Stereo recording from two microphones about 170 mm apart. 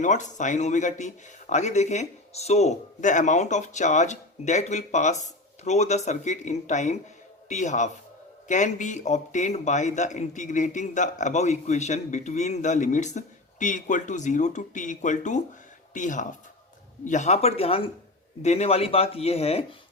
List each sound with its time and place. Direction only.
0.0 s speech: 45° left (ahead or behind)